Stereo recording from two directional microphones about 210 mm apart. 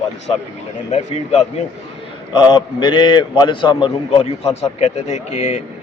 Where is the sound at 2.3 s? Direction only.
20° left (ahead or behind).